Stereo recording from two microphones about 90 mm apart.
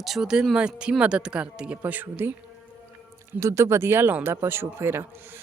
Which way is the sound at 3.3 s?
35° right (ahead or behind).